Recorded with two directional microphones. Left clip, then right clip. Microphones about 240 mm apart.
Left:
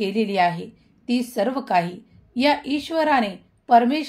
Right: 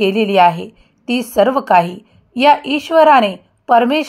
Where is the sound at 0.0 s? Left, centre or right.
Right.